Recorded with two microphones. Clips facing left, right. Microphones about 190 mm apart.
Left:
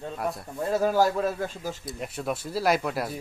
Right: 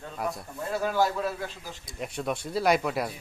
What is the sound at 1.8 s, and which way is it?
A man's voice, centre (ahead or behind).